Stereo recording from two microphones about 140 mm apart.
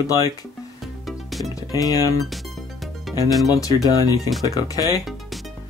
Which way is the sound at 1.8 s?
25° left (ahead or behind).